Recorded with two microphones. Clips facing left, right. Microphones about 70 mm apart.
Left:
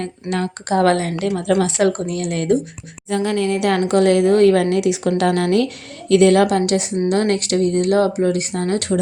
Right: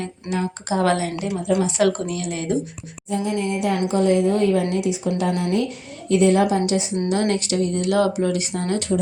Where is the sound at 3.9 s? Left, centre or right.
Left.